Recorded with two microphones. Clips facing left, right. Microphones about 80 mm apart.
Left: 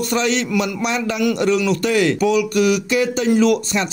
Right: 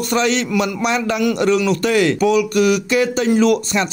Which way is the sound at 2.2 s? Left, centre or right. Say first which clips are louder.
Right 2 dB; right.